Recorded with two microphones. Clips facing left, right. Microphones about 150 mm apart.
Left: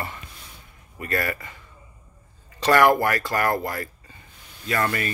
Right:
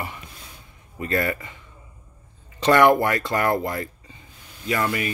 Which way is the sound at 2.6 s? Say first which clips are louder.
Right 1 dB; 20° right (ahead or behind).